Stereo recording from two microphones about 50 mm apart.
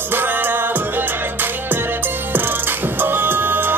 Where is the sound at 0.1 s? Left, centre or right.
Right.